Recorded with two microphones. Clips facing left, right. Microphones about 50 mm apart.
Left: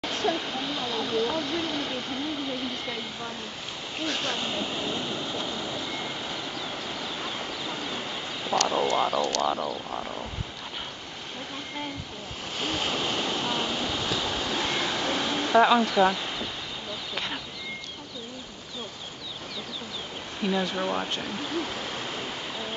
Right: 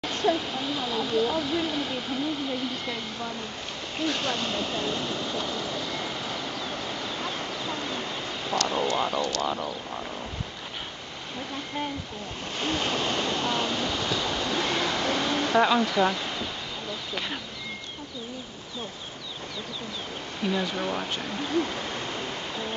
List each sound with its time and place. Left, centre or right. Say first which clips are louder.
0.0 s a sound: right 2 dB; centre
4.0 s vehicle: right 2 dB; centre
8.9 s speech: left 2 dB; centre
9.2 s speech: left 2 dB; left
9.5 s speech: left 2 dB; centre
12.5 s waves: right 1 dB; centre
17.1 s speech: even; centre
20.4 s speech: left 1 dB; centre